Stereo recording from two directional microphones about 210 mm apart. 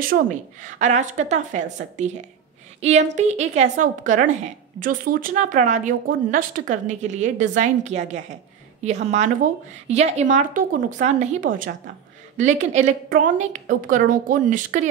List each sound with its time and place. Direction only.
0.1 s speech: 35° right (ahead or behind)